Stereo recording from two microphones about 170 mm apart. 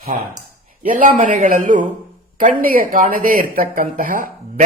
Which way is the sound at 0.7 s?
55° right (ahead or behind).